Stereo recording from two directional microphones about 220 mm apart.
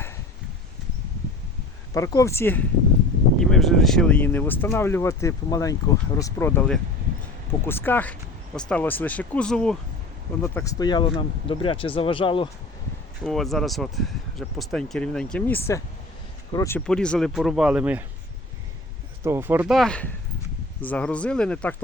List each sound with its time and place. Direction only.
1.9 s speech: 15° left (ahead or behind)
13.2 s speech: centre (ahead or behind)
19.2 s speech: 10° right (ahead or behind); by 21.8 s 5° left (ahead or behind)